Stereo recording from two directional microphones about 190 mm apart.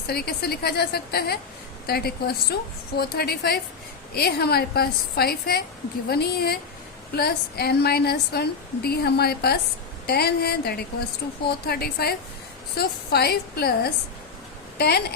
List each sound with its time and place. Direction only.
0.1 s a woman's voice: 55° left (ahead or behind)